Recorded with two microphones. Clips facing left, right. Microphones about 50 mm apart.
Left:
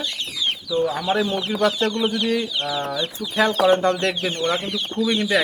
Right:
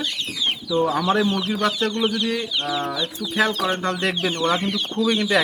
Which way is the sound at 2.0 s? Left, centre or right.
Centre.